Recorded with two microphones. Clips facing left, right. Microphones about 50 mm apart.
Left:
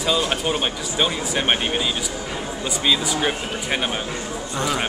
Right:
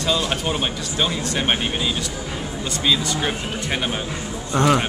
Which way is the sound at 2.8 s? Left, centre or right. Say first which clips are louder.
Even; centre.